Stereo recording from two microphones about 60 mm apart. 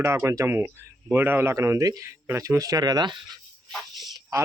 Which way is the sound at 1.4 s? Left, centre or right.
Right.